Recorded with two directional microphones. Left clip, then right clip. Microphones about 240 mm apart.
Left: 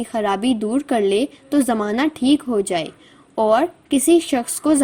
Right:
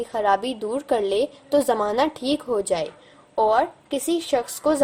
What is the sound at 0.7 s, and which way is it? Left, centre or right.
A woman's voice, left.